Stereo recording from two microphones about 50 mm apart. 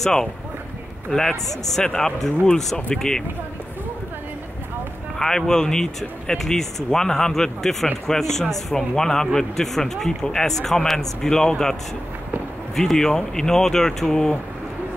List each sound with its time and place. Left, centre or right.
0.0 s a man's voice: centre
5.2 s a man's voice: centre
12.7 s a man's voice: centre